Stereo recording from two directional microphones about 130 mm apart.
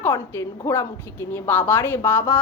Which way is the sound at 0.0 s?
20° left (ahead or behind).